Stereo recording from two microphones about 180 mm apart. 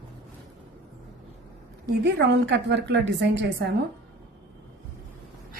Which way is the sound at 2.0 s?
75° right (ahead or behind).